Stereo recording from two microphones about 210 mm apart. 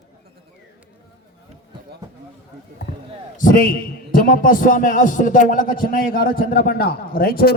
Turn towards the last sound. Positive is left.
turn(degrees=45)  # may be behind; listen again after turning